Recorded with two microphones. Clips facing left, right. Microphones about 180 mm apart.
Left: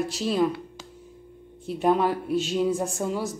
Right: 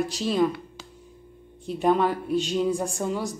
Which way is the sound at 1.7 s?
5° left (ahead or behind).